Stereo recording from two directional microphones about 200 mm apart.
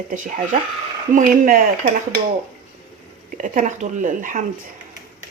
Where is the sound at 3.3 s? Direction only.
40° right (ahead or behind).